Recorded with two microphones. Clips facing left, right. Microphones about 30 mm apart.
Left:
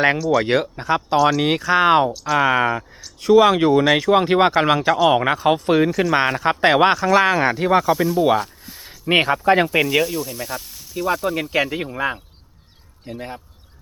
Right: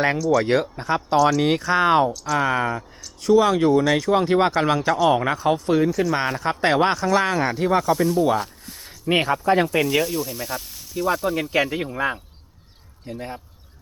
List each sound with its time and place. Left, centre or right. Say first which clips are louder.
0.0 s speech: left 2 dB; left
0.5 s speech: left 2 dB; centre
1.5 s speech: left 3 dB; centre
3.8 s speech: left 4 dB; left
4.1 s speech: left 3 dB; left
6.2 s speech: left 4 dB; centre
8.4 s a sound: left 2 dB; centre
9.0 s speech: left 3 dB; left
9.8 s speech: left 2 dB; centre